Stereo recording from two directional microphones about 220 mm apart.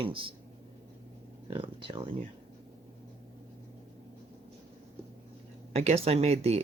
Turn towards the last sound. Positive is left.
turn(degrees=-30)  # may be behind; listen again after turning